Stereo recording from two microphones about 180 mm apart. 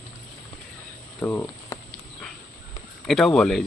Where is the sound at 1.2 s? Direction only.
10° left (ahead or behind).